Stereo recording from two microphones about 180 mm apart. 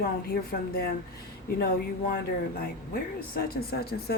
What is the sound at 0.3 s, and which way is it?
Speech, 60° left (ahead or behind).